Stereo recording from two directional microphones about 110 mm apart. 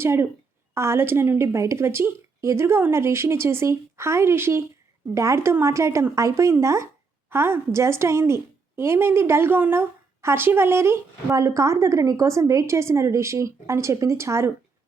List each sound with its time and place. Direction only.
0.0 s a woman's voice: 20° right (ahead or behind)